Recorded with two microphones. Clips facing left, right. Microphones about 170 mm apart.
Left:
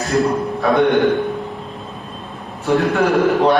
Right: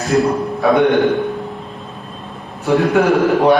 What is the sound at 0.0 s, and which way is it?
A man's voice, centre (ahead or behind).